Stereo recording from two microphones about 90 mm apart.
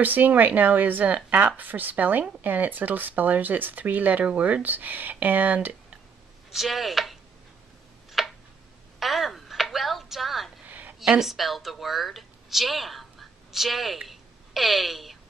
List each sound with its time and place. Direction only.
0.0 s speech: 20° right (ahead or behind)
6.5 s speech: centre (ahead or behind)
8.2 s tick-tock: centre (ahead or behind)
9.0 s a sound: centre (ahead or behind)
10.7 s a sound: 20° right (ahead or behind)
11.0 s a woman's voice: 5° right (ahead or behind)